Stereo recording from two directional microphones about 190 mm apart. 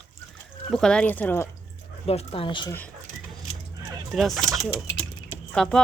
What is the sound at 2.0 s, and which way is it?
Speech, 30° left (ahead or behind).